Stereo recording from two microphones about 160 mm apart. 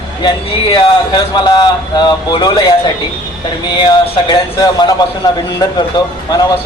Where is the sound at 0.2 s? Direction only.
30° left (ahead or behind).